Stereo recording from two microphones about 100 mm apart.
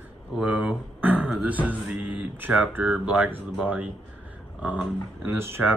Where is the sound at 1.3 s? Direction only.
15° right (ahead or behind).